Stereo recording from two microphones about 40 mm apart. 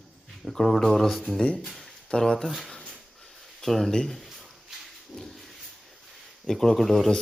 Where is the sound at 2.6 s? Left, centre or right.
Centre.